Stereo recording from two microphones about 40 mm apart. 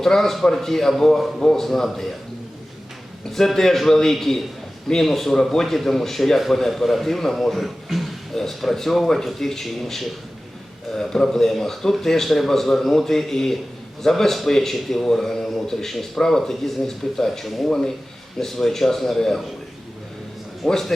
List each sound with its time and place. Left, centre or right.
0.0 s a man's voice: centre
3.3 s a man's voice: centre
17.7 s a man's voice: centre
20.7 s a man's voice: centre